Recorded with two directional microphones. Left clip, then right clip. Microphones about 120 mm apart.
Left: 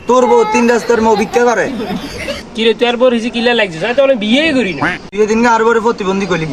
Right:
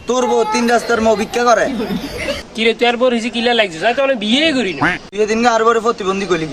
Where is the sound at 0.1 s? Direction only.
10° right (ahead or behind).